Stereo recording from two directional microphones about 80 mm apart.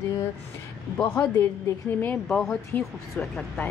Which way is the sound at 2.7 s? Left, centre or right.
Centre.